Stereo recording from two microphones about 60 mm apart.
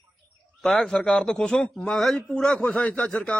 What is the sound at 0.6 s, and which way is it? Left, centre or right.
A man's voice, centre.